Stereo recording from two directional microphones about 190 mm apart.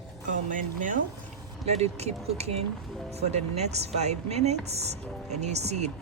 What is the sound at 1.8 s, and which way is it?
Speech, 35° right (ahead or behind).